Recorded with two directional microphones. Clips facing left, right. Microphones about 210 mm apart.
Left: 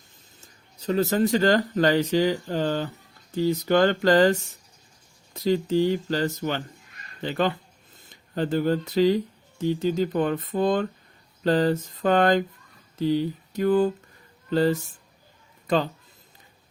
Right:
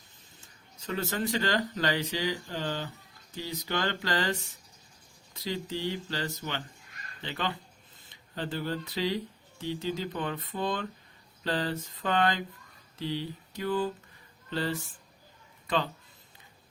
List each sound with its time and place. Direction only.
0.8 s speech: 35° left (ahead or behind)
13.0 s mantra: 45° left (ahead or behind)
14.5 s speech: 40° left (ahead or behind)